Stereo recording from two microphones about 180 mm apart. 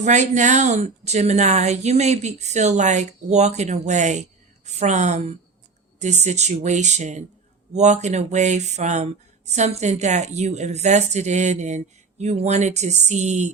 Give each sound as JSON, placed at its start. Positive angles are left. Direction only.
{"t": 0.0, "sound": "a woman's voice", "side_deg": -40}